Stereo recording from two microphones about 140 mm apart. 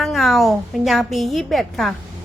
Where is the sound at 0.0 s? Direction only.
Centre (ahead or behind).